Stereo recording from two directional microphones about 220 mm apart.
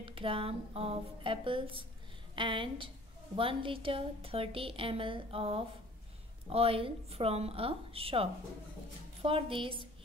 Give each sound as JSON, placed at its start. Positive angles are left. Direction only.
{"t": 0.0, "sound": "a woman's voice", "side_deg": -25}